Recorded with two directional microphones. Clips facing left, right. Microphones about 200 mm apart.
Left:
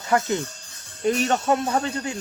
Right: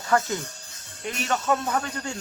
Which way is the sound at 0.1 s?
20° left (ahead or behind).